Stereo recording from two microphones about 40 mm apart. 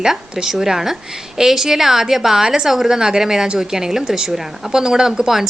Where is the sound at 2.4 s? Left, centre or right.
Centre.